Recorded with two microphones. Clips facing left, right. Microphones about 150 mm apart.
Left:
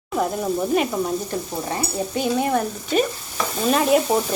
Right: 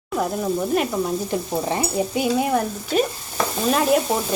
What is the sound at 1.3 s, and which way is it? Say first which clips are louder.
Stir: right 2 dB; 15° right (ahead or behind).